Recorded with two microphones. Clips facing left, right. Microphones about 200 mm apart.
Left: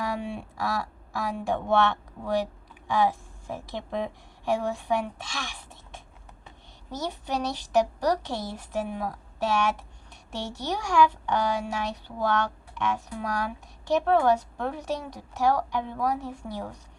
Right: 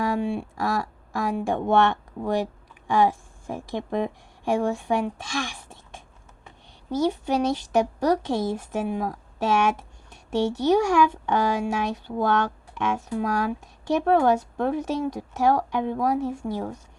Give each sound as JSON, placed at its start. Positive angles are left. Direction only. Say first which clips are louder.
{"t": 0.0, "sound": "speech", "louder": "right 6 dB", "side_deg": -50}
{"t": 7.3, "sound": "a woman's voice", "louder": "right 7 dB", "side_deg": -50}